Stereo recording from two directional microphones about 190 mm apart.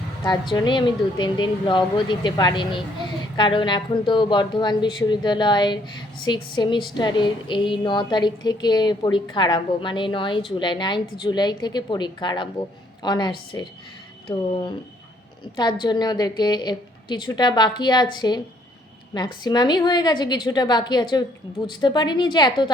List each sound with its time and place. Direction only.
0.3 s female singing: 25° left (ahead or behind)
15.5 s female singing: 20° left (ahead or behind)